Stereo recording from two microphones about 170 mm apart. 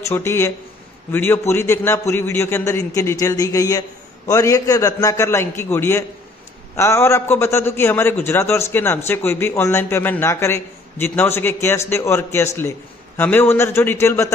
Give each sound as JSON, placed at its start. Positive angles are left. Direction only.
{"t": 0.0, "sound": "a man's voice", "side_deg": 15}